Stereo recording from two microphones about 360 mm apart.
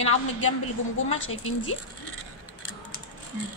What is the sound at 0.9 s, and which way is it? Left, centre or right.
Speech, left.